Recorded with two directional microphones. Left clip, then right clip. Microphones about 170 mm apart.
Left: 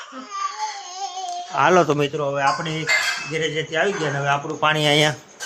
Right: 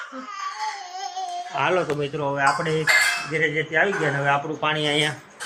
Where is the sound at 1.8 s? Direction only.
55° left (ahead or behind).